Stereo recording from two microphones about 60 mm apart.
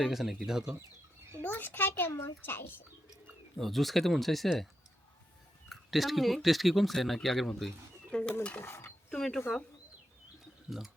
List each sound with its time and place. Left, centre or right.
0.0 s speech: centre
1.4 s a child's voice: left
3.6 s speech: centre
5.6 s speech: centre
8.1 s dishes: centre
8.6 s mechanisms: left
9.0 s speech: centre
10.7 s speech: centre